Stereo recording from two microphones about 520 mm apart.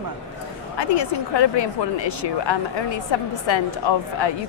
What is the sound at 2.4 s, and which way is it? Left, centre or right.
A woman's voice, left.